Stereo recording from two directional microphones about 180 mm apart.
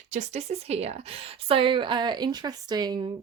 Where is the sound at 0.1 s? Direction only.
40° right (ahead or behind).